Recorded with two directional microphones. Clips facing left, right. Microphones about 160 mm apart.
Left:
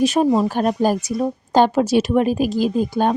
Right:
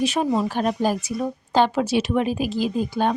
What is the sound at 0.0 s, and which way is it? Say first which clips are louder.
A woman's voice: left 5 dB; 40° left (ahead or behind).